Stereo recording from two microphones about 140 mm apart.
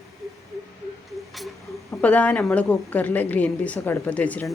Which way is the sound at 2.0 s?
10° left (ahead or behind).